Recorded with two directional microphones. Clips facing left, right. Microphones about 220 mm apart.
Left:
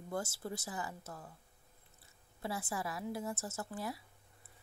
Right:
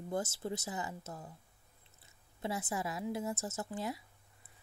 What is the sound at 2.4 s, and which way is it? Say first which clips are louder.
Speech: right 2 dB; 20° right (ahead or behind).